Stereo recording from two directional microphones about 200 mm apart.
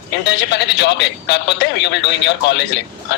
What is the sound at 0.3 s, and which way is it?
Speech, 60° left (ahead or behind).